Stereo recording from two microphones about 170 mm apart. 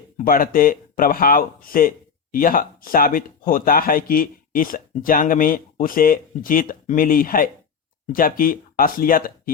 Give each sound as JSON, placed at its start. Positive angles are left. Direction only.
{"t": 0.3, "sound": "speech", "side_deg": 55}